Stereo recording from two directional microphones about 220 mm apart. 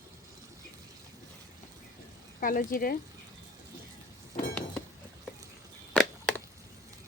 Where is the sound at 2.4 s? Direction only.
40° left (ahead or behind).